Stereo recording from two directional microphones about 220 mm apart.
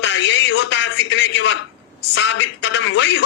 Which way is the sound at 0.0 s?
55° left (ahead or behind).